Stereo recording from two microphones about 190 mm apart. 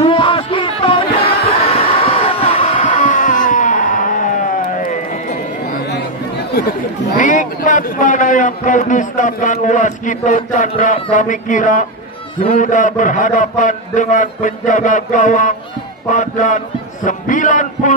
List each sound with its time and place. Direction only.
0.0 s music: 25° left (ahead or behind)
1.6 s a sound: 30° left (ahead or behind)
7.2 s a man's voice: 40° left (ahead or behind)